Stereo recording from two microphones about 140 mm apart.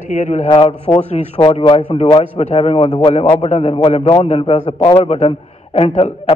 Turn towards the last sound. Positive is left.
turn(degrees=45)  # may be behind; listen again after turning